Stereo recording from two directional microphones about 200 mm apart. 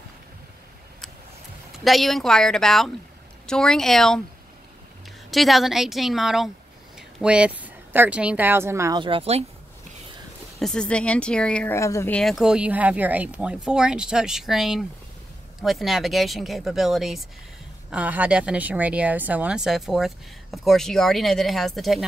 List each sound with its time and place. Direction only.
1.7 s speech: centre (ahead or behind)
5.3 s speech: centre (ahead or behind)
9.0 s speech: 30° right (ahead or behind)
10.6 s speech: 5° left (ahead or behind)